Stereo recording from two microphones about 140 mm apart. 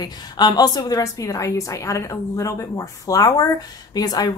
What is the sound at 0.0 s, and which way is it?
A woman's voice, 30° left (ahead or behind).